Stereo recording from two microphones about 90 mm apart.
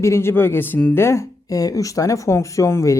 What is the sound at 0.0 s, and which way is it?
Speech, 30° left (ahead or behind).